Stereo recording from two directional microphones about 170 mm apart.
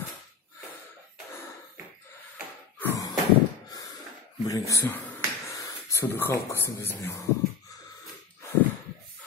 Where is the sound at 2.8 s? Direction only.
20° left (ahead or behind).